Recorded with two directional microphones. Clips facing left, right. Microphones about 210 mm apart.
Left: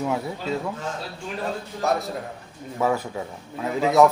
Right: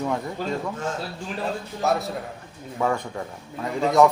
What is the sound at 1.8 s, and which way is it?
A man's voice, centre (ahead or behind).